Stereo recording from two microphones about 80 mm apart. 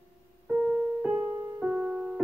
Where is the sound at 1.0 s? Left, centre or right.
Centre.